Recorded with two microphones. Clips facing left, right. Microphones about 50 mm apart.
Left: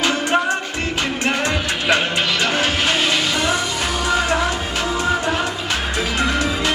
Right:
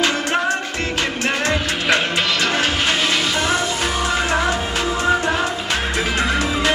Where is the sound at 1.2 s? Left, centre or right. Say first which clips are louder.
Even; left.